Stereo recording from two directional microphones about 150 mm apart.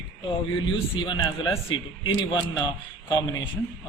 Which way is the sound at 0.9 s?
30° left (ahead or behind).